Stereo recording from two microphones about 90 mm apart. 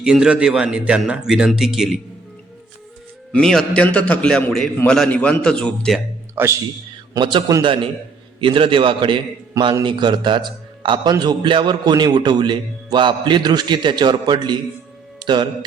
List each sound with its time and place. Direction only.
0.0 s speech: 10° right (ahead or behind)
3.3 s a man's voice: 5° left (ahead or behind)
6.4 s speech: 25° right (ahead or behind)
7.2 s a man's voice: 60° right (ahead or behind)
7.6 s a man's voice: 75° right (ahead or behind); by 14.6 s 55° right (ahead or behind)
15.2 s music: 55° right (ahead or behind)